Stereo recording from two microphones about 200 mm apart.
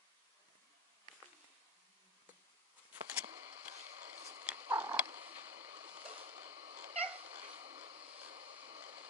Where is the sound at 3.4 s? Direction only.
30° right (ahead or behind).